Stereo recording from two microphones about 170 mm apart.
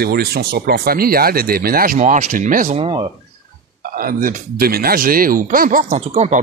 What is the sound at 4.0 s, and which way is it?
Speech, 55° right (ahead or behind).